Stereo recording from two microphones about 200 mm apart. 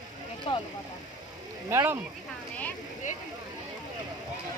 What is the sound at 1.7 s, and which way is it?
Speech, 10° right (ahead or behind).